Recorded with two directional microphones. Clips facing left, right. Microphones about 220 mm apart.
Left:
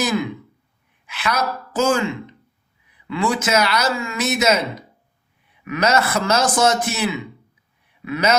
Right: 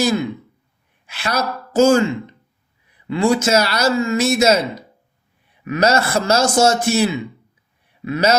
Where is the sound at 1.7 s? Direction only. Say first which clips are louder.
Right 6 dB; 40° right (ahead or behind).